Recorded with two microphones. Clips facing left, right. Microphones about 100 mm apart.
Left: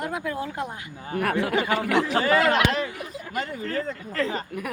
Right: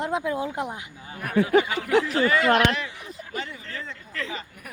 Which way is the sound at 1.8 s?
90° left.